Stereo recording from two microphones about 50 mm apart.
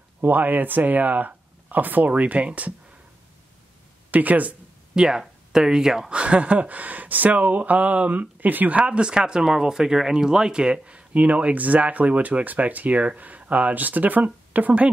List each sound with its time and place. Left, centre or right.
0.2 s speech: right
4.1 s speech: right
4.9 s speech: centre
6.1 s a sound: right